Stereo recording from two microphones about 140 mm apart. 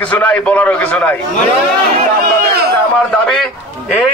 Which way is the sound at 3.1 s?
5° left (ahead or behind).